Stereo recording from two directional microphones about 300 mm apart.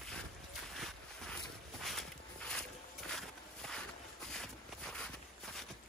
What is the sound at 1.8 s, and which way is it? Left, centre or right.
Walk, centre.